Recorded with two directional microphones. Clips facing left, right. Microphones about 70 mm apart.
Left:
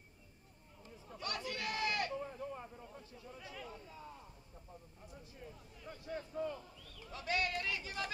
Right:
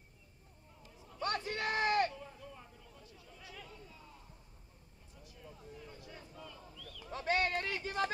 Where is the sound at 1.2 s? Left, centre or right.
Right.